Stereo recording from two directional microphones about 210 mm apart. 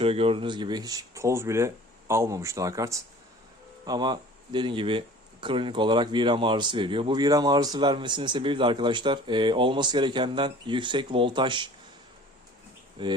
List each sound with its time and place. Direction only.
0.0 s speech: 25° right (ahead or behind)
13.0 s speech: 20° right (ahead or behind)